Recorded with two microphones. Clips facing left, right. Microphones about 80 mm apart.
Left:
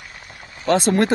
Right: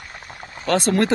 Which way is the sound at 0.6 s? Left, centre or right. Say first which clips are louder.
Left 2 dB; left.